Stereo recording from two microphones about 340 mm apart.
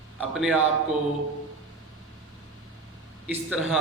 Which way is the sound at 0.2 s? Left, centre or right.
Centre.